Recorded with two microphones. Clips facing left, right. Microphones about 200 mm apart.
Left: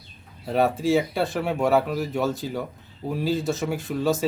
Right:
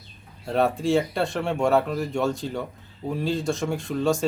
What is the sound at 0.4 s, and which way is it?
Speech, 5° left (ahead or behind).